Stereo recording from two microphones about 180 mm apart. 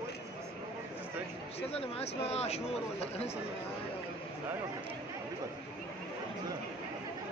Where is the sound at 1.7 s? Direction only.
35° left (ahead or behind).